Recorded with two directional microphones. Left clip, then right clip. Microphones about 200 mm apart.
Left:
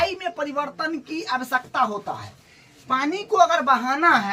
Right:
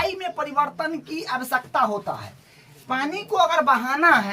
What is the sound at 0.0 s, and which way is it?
Speech, 15° right (ahead or behind).